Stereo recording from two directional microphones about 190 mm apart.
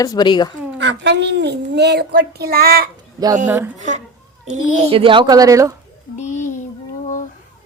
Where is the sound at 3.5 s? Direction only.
15° right (ahead or behind).